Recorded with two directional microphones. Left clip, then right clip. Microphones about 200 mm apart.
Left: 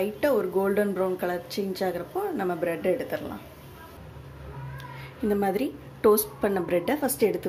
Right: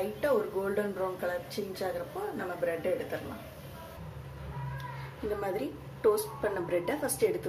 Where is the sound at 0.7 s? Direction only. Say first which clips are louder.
Left 7 dB; 45° left (ahead or behind).